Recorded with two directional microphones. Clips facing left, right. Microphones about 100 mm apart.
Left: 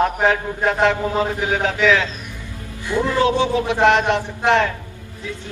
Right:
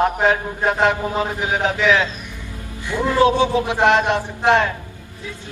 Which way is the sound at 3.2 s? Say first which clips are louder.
Right 4 dB; 20° right (ahead or behind).